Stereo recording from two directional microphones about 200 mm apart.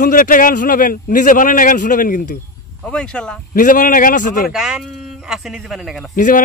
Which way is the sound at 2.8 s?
5° left (ahead or behind).